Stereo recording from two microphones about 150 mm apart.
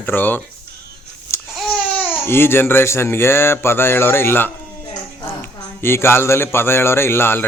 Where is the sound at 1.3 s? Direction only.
20° left (ahead or behind).